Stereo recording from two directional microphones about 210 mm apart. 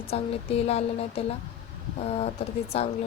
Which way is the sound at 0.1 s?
30° left (ahead or behind).